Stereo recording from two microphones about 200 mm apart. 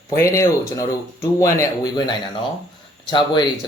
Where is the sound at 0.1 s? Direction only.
15° left (ahead or behind).